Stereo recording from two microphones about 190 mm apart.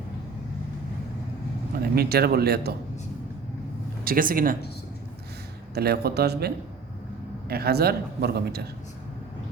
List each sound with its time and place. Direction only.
1.8 s a man's voice: 55° right (ahead or behind)
4.0 s speech: 50° right (ahead or behind)
5.7 s a man's voice: 55° right (ahead or behind)